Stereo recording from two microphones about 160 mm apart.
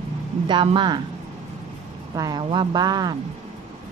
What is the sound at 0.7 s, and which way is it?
Speech, 30° right (ahead or behind).